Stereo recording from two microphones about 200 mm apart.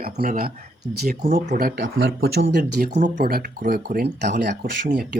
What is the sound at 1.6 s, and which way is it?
Speech, 50° right (ahead or behind).